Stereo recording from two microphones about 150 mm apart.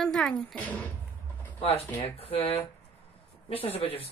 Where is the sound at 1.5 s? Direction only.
40° left (ahead or behind).